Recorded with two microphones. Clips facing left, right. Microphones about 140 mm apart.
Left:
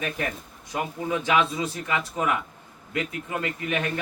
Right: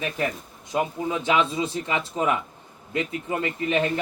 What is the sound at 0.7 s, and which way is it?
A man's voice, 25° right (ahead or behind).